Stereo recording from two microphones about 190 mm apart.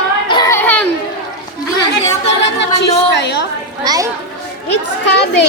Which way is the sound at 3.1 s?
65° left (ahead or behind).